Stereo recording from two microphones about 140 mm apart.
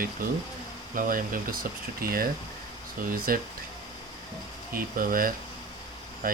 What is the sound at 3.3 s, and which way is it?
Speech, 90° right.